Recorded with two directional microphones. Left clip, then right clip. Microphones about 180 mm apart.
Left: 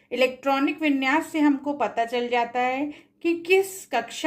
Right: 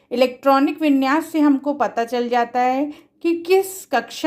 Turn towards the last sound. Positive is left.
turn(degrees=-40)  # may be behind; listen again after turning